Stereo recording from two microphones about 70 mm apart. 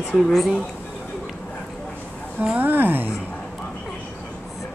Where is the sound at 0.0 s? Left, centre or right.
Centre.